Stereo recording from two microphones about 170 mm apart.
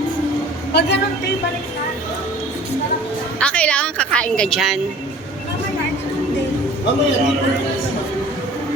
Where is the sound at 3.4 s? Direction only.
5° left (ahead or behind).